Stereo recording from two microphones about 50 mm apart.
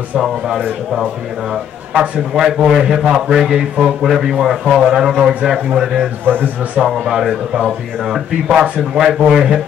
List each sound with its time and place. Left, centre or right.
2.0 s speech: centre
6.2 s speech: right
6.8 s speech: centre